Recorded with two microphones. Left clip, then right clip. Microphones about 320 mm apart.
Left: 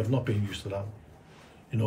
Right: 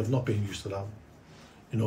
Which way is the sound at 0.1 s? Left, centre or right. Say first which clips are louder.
Even; centre.